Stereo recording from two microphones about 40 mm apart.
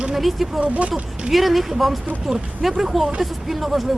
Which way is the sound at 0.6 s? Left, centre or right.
Right.